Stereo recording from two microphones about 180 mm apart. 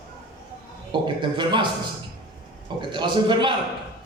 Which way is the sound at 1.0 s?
25° right (ahead or behind).